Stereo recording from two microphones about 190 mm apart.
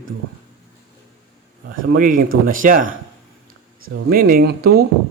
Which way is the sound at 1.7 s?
90° right.